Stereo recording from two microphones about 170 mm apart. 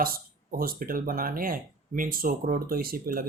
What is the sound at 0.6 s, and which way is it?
Speech, 60° right (ahead or behind).